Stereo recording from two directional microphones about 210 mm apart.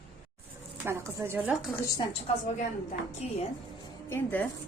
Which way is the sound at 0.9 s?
10° right (ahead or behind).